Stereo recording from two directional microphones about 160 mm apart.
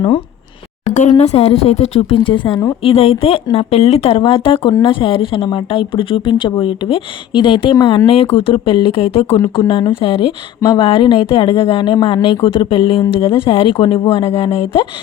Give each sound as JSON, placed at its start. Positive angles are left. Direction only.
{"t": 1.1, "sound": "speech", "side_deg": 40}